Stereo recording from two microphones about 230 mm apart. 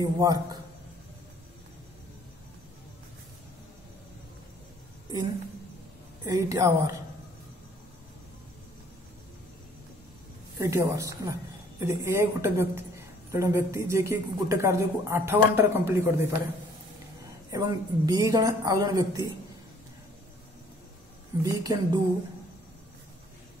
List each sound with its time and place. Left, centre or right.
0.0 s a woman's voice: centre
6.2 s a woman's voice: centre
10.6 s a woman's voice: centre
17.5 s a woman's voice: centre
21.4 s a woman's voice: centre